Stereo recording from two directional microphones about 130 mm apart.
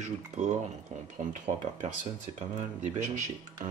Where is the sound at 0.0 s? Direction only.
65° right (ahead or behind).